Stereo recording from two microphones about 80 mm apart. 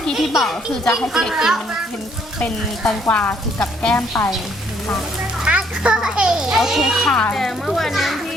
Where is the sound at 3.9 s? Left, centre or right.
Left.